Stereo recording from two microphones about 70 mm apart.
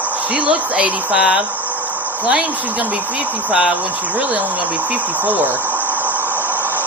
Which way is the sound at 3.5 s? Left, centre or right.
Centre.